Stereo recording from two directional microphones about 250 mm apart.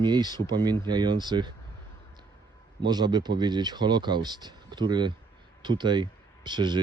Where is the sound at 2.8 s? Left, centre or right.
Centre.